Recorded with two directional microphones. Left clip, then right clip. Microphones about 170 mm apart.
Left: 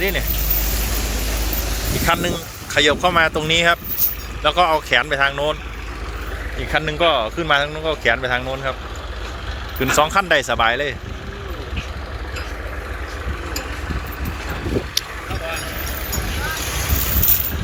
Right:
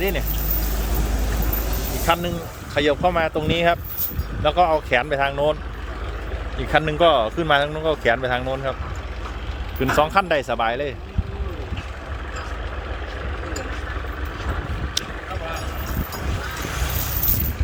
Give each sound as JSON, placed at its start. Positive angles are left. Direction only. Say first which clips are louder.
{"t": 0.0, "sound": "speech", "louder": "left 3 dB", "side_deg": -15}
{"t": 2.0, "sound": "speech", "louder": "left 1 dB", "side_deg": 0}
{"t": 6.6, "sound": "speech", "louder": "right 1 dB", "side_deg": -20}
{"t": 9.8, "sound": "speech", "louder": "left 2 dB", "side_deg": -5}